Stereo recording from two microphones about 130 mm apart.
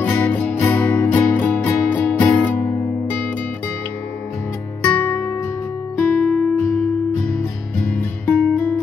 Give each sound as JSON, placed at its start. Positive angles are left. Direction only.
{"t": 0.0, "sound": "music", "side_deg": 15}
{"t": 4.8, "sound": "music", "side_deg": 20}
{"t": 7.8, "sound": "music", "side_deg": 10}